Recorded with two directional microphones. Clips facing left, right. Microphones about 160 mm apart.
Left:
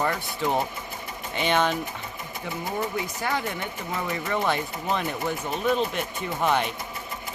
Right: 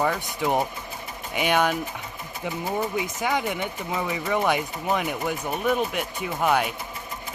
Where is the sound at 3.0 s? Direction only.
15° right (ahead or behind).